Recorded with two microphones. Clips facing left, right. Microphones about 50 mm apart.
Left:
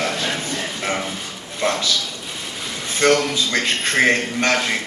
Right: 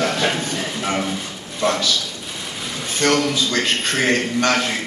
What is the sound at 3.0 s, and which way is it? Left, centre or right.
A man's voice, left.